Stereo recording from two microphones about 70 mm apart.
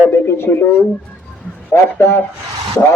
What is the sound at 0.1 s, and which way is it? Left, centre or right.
Speech, left.